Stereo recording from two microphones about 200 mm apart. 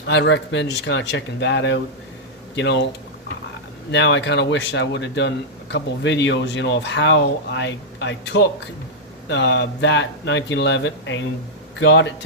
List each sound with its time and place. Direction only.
0.1 s speech: 60° left (ahead or behind)
3.9 s speech: 60° left (ahead or behind)